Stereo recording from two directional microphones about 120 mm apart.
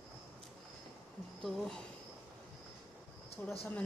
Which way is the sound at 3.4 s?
20° left (ahead or behind).